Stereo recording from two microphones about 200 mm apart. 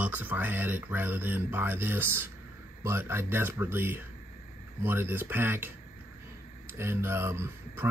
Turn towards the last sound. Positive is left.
turn(degrees=-10)  # may be behind; listen again after turning